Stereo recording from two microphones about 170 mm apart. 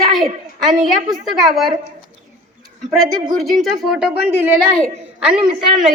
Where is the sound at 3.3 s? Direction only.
Centre (ahead or behind).